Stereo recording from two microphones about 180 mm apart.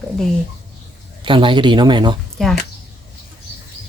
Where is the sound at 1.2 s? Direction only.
25° right (ahead or behind).